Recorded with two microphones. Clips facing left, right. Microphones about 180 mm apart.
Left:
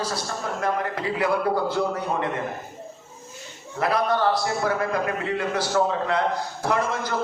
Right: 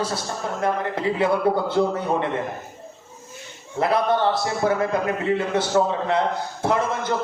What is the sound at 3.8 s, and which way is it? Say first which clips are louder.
A man's voice: right 2 dB; 25° right (ahead or behind).